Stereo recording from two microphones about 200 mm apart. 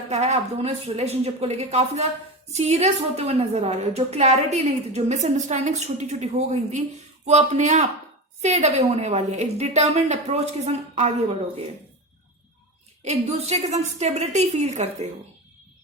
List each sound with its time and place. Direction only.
0.1 s a woman's voice: 30° right (ahead or behind)
13.1 s a woman's voice: 30° right (ahead or behind)